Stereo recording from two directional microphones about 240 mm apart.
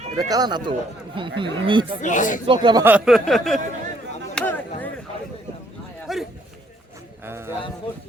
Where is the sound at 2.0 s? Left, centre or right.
Left.